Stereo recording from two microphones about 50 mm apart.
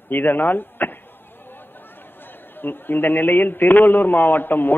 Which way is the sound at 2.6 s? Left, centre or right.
Left.